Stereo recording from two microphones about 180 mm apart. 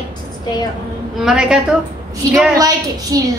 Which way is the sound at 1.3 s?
5° right (ahead or behind).